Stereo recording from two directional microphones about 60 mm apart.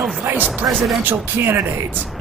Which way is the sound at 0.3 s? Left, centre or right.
Right.